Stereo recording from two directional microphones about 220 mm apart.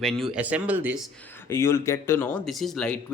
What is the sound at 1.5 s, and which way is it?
Speech, 10° left (ahead or behind).